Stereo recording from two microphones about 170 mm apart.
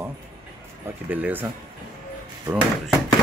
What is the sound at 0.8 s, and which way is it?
Speech, 10° right (ahead or behind).